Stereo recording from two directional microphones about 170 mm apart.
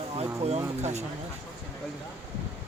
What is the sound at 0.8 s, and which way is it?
Speech, 40° right (ahead or behind).